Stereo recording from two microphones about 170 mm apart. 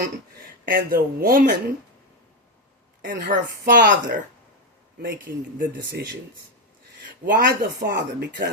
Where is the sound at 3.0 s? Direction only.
55° right (ahead or behind).